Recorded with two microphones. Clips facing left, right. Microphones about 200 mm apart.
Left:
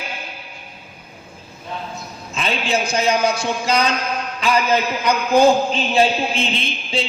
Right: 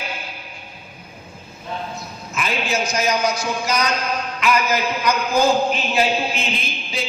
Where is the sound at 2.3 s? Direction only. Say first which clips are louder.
Left 2 dB; 25° left (ahead or behind).